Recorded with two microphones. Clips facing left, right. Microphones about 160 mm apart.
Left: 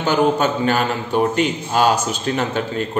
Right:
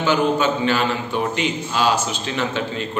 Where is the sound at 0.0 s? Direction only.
45° left (ahead or behind).